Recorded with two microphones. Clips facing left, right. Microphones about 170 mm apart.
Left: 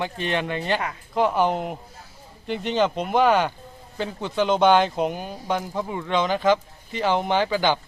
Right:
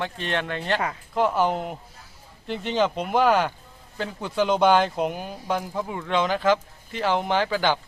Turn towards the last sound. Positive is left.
turn(degrees=0)  # may be behind; listen again after turning